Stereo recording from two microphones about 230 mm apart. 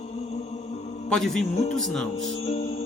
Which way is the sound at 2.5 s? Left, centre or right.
Left.